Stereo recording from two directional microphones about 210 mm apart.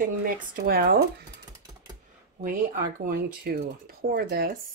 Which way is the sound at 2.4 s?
40° right (ahead or behind).